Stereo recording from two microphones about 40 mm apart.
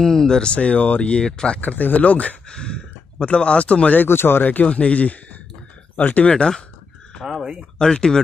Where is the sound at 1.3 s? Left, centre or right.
Centre.